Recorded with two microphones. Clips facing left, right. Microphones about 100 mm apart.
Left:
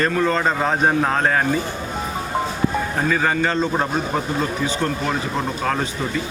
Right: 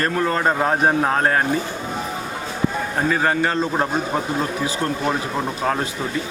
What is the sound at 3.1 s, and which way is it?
A man's voice, 5° right (ahead or behind).